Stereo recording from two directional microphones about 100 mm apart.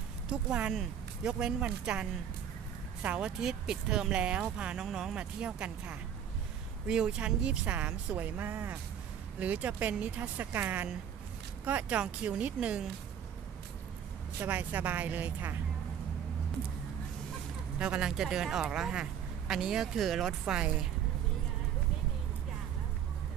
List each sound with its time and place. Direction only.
0.3 s speech: 10° right (ahead or behind)
14.4 s speech: 15° right (ahead or behind)
17.7 s speech: 10° right (ahead or behind)